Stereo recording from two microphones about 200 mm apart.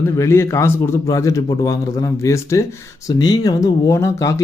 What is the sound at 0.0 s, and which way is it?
Speech, 15° left (ahead or behind).